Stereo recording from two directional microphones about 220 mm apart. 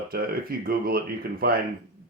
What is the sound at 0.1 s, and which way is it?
Speech, 45° right (ahead or behind).